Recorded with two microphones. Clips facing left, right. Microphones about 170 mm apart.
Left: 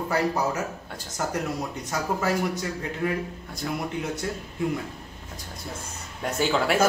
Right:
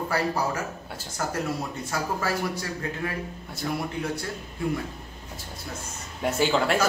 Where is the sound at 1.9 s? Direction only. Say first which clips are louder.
Left 3 dB; 20° left (ahead or behind).